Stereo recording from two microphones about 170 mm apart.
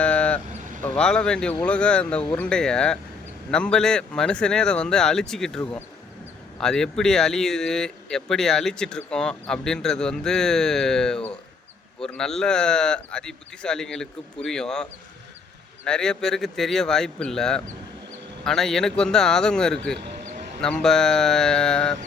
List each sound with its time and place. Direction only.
0.0 s vehicle: 5° left (ahead or behind)
0.8 s speech: 10° left (ahead or behind)
20.2 s a sound: 55° right (ahead or behind)
20.6 s speech: 5° left (ahead or behind)